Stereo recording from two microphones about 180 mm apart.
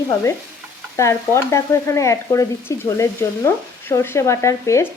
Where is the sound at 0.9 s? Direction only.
15° left (ahead or behind).